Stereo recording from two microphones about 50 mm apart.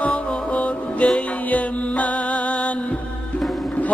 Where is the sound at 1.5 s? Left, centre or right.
Left.